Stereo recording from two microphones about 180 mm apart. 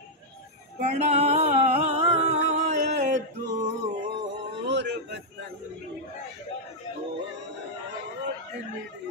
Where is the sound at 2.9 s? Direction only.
40° right (ahead or behind).